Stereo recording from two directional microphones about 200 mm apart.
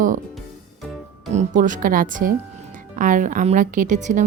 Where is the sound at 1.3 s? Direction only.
40° right (ahead or behind).